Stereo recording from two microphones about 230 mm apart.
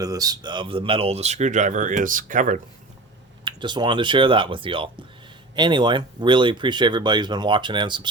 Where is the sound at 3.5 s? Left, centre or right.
Centre.